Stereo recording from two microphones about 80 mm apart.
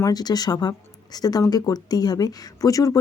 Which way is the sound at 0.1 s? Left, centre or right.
Left.